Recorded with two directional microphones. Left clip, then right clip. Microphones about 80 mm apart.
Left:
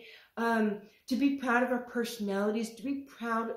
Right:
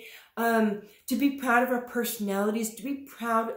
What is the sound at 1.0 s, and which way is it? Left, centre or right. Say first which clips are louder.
Speech: right 3 dB; right.